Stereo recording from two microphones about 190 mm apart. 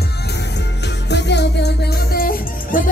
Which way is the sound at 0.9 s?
65° left (ahead or behind).